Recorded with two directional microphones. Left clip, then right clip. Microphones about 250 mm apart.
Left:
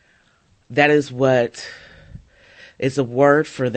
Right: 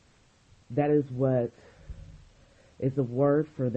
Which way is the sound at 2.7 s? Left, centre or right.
Centre.